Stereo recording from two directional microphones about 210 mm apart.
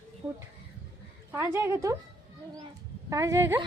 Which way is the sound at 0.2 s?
10° right (ahead or behind).